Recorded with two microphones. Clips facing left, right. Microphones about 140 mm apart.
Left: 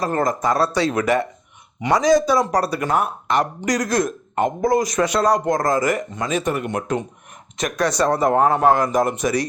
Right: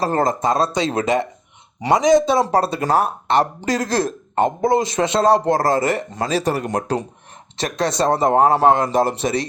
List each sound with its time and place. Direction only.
0.0 s speech: 30° right (ahead or behind)